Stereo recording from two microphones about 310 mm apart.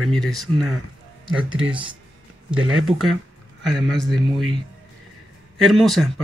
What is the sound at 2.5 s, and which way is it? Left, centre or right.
Speech, right.